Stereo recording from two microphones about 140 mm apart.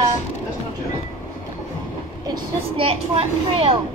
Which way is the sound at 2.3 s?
40° right (ahead or behind).